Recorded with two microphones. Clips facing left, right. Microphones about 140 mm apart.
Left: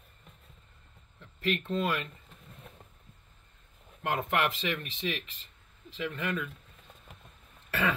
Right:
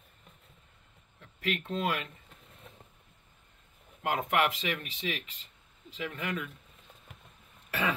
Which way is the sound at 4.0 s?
15° right (ahead or behind).